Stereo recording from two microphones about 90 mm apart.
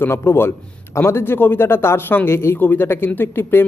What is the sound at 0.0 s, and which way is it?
Speech, 25° left (ahead or behind).